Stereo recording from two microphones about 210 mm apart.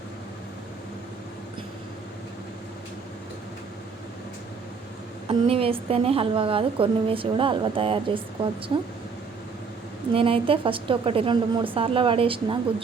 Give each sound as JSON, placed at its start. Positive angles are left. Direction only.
{"t": 5.3, "sound": "a woman's voice", "side_deg": -25}
{"t": 10.2, "sound": "a woman's voice", "side_deg": -25}